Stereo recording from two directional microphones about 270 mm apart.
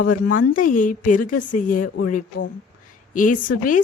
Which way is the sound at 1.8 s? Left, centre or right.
Left.